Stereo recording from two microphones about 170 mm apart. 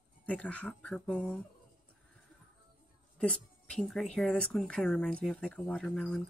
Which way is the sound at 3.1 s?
5° left (ahead or behind).